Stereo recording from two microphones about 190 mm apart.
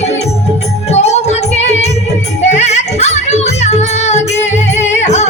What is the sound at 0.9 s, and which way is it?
Music, 35° left (ahead or behind).